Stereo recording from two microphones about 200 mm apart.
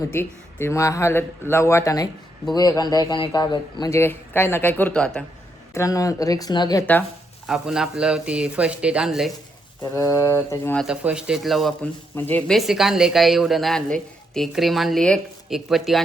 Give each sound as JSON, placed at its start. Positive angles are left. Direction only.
{"t": 0.1, "sound": "a man's voice", "side_deg": 10}
{"t": 5.7, "sound": "a man's voice", "side_deg": 15}
{"t": 7.4, "sound": "speech", "side_deg": -5}
{"t": 9.9, "sound": "a man's voice", "side_deg": 15}
{"t": 10.8, "sound": "speech", "side_deg": -5}